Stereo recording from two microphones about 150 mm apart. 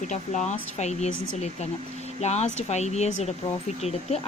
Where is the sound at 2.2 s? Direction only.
50° left (ahead or behind).